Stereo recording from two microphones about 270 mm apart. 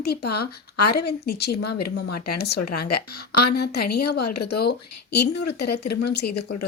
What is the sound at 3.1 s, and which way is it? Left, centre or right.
Speech, left.